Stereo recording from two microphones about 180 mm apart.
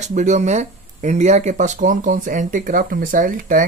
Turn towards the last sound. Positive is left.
turn(degrees=-50)  # may be behind; listen again after turning